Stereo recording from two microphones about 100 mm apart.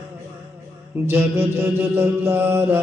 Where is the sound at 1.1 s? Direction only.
20° right (ahead or behind).